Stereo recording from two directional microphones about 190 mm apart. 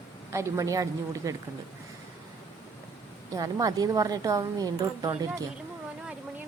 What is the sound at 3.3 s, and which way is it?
A woman's voice, 20° right (ahead or behind).